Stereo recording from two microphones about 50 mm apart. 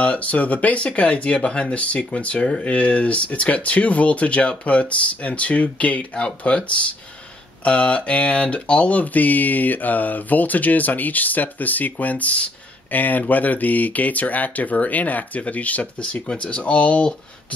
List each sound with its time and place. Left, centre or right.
0.0 s speech: left